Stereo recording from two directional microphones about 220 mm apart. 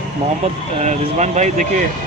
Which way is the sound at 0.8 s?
30° right (ahead or behind).